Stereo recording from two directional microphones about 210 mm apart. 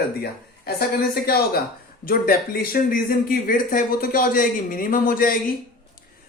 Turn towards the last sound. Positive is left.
turn(degrees=40)  # may be behind; listen again after turning